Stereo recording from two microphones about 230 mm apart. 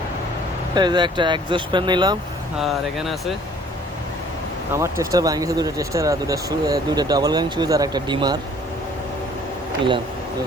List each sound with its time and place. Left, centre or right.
0.7 s speech: centre
2.6 s speech: centre
4.7 s speech: centre